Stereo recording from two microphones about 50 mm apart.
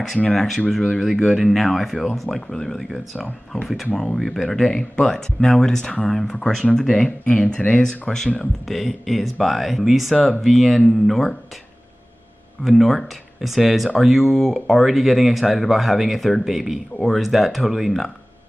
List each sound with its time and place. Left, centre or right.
0.3 s speech: centre
7.2 s speech: left
8.1 s speech: centre
12.6 s speech: centre